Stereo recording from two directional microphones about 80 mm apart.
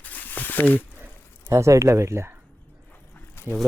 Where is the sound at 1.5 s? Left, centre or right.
Right.